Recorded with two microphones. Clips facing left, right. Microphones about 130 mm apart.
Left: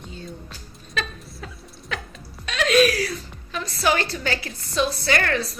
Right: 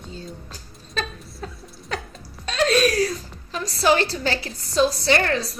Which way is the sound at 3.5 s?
35° right (ahead or behind).